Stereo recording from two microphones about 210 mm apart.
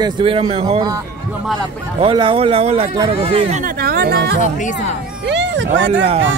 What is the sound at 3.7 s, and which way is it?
Speech, 45° right (ahead or behind).